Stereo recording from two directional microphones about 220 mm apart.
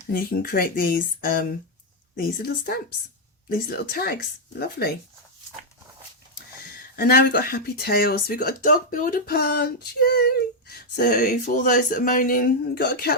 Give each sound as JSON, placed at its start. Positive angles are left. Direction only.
{"t": 0.1, "sound": "speech", "side_deg": 40}
{"t": 6.9, "sound": "speech", "side_deg": 45}